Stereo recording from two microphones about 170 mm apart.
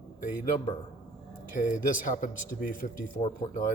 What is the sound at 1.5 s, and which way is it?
Speech, 50° left (ahead or behind).